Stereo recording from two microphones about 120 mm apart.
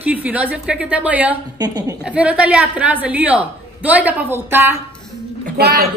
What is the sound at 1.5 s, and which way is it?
Speech, 35° right (ahead or behind).